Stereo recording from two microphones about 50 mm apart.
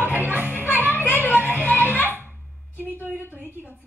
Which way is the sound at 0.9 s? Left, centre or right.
Left.